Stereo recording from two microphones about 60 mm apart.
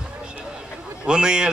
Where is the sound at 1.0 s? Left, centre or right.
Centre.